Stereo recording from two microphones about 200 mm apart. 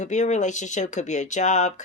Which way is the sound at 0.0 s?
35° left (ahead or behind).